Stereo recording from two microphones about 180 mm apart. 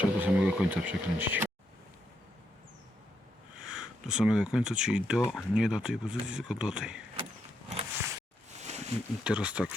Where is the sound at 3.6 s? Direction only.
5° right (ahead or behind).